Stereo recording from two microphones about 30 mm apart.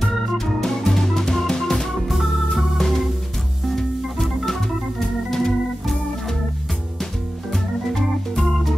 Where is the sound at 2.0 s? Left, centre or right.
Centre.